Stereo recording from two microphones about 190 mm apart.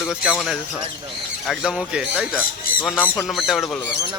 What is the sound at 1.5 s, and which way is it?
Speech, 5° right (ahead or behind).